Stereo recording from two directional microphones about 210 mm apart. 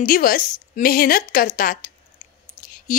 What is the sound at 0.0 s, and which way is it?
A woman's voice, 40° left (ahead or behind).